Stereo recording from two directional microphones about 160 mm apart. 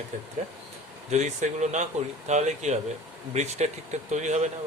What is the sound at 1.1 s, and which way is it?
Speech, 45° right (ahead or behind).